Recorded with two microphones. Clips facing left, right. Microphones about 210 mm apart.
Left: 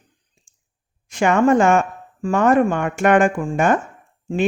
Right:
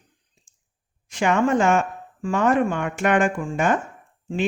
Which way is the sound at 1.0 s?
50° left (ahead or behind).